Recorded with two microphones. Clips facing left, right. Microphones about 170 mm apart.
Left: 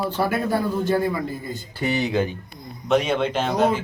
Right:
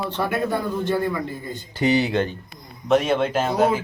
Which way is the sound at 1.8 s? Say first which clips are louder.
Right 4 dB; 85° right.